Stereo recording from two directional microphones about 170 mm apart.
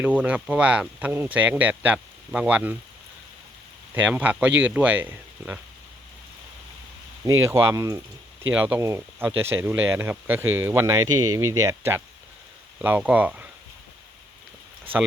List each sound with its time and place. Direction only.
0.0 s speech: 10° right (ahead or behind)
4.1 s speech: 10° right (ahead or behind)
7.5 s speech: 20° right (ahead or behind)
8.5 s speech: 10° right (ahead or behind)